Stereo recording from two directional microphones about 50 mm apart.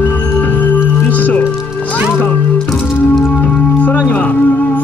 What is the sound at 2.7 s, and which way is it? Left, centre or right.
Music, centre.